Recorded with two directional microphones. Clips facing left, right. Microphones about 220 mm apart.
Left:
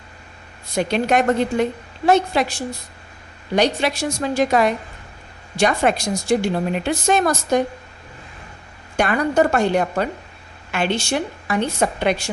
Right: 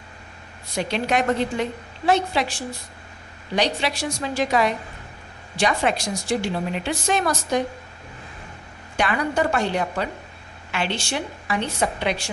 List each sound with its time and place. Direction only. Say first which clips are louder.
0.8 s a woman's voice: left 5 dB; 50° left (ahead or behind)
9.0 s a woman's voice: left 5 dB; 45° left (ahead or behind)